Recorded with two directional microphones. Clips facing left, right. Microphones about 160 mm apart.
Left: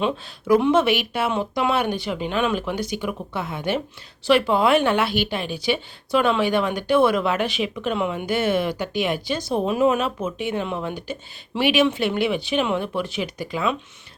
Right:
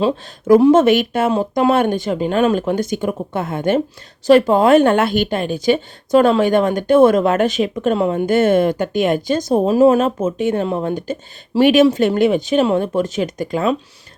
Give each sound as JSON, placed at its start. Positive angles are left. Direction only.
{"t": 0.0, "sound": "a woman's voice", "side_deg": -40}